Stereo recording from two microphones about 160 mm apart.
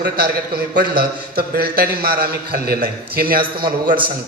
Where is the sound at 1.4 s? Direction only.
70° right (ahead or behind).